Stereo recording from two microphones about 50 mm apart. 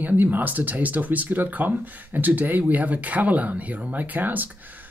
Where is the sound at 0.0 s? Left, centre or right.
Right.